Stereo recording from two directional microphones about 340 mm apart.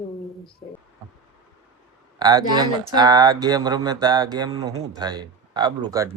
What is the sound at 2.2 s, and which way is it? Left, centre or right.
Speech, centre.